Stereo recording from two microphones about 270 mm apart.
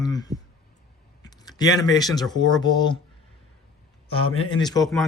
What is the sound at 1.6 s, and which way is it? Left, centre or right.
Speech, centre.